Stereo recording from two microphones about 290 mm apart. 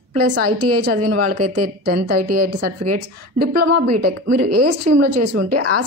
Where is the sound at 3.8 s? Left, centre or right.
Right.